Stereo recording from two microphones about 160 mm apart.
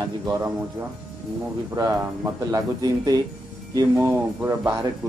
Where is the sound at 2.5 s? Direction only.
25° right (ahead or behind).